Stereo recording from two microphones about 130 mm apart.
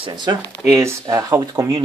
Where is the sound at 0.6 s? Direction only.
20° right (ahead or behind).